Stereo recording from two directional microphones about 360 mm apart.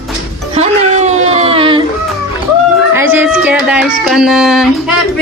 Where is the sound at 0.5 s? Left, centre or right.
Centre.